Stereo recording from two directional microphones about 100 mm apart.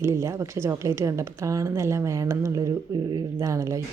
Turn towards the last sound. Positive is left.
turn(degrees=-30)  # may be behind; listen again after turning